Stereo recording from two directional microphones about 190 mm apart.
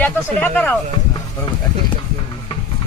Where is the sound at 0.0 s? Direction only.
5° left (ahead or behind).